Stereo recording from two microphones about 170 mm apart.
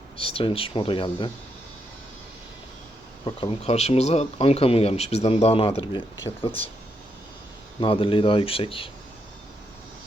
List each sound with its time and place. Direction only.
0.2 s speech: 30° left (ahead or behind)
3.2 s speech: 35° left (ahead or behind)
7.8 s speech: 30° left (ahead or behind)